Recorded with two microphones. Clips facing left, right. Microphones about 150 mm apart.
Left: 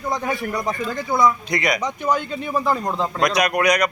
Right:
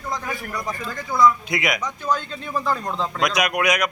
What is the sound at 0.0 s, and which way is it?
A man's voice, 25° left (ahead or behind).